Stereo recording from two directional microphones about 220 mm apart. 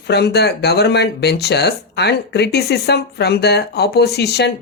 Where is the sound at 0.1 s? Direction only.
50° left (ahead or behind).